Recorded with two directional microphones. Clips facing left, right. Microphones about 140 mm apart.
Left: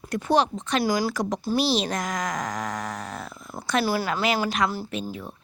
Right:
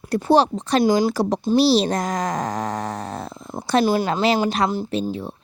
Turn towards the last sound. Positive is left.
turn(degrees=-30)  # may be behind; listen again after turning